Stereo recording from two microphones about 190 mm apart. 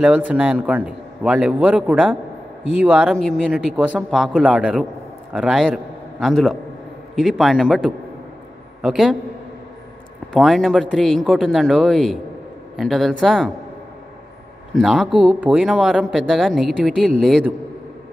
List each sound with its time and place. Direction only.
0.0 s a man's voice: 5° right (ahead or behind)
10.3 s speech: centre (ahead or behind)
14.8 s speech: centre (ahead or behind)